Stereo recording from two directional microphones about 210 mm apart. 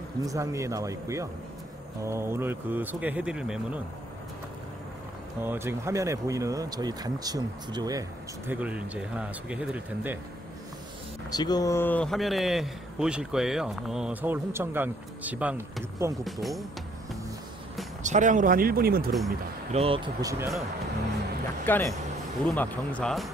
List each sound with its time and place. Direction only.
0.2 s speech: 15° right (ahead or behind)
5.4 s speech: 10° right (ahead or behind)
8.5 s speech: 5° right (ahead or behind)
11.2 s speech: 20° left (ahead or behind); by 16.2 s 15° right (ahead or behind)
16.3 s speech: centre (ahead or behind)
18.0 s speech: 35° right (ahead or behind)
19.7 s speech: 30° right (ahead or behind)
20.2 s speech: 15° right (ahead or behind)
21.6 s speech: 10° left (ahead or behind)